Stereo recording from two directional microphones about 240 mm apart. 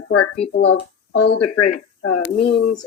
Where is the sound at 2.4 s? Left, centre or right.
Left.